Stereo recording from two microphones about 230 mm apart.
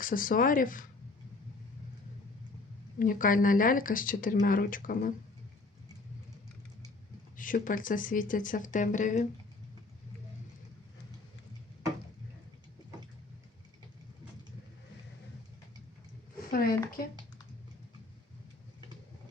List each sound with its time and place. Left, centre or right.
0.0 s speech: left
3.0 s speech: left
7.3 s speech: left
16.5 s a sound: left